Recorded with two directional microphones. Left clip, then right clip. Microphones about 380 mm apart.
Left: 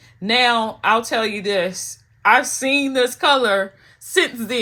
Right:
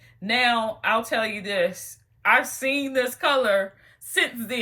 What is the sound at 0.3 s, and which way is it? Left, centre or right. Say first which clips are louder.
Speech: left 5 dB; centre.